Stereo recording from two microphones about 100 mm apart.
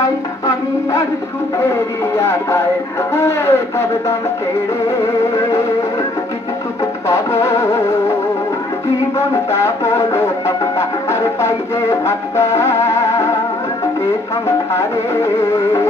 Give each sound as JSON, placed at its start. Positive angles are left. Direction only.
{"t": 2.2, "sound": "speech", "side_deg": 20}
{"t": 7.1, "sound": "music", "side_deg": 30}
{"t": 9.1, "sound": "music", "side_deg": 30}